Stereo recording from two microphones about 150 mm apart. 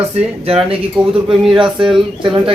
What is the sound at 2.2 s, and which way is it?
Speech, 30° right (ahead or behind).